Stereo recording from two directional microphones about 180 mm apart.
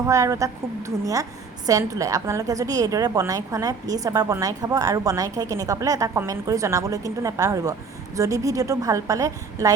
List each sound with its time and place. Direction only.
0.1 s a woman's voice: 15° right (ahead or behind)